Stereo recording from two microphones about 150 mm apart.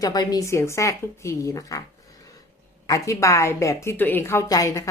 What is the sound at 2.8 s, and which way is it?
A woman's voice, 20° left (ahead or behind).